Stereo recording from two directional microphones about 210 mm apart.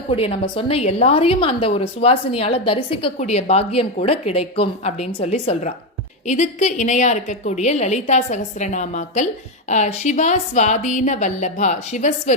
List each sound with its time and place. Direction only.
0.1 s a woman's voice: 25° left (ahead or behind)